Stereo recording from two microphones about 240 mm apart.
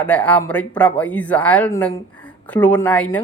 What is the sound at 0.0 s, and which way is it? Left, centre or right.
Speech, centre.